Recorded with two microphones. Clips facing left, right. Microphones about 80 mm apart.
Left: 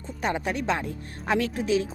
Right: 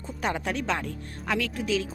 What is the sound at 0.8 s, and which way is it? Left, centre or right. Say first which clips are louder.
Speech: left 2 dB; left.